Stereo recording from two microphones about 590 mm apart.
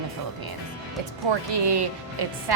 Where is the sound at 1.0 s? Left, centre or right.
Right.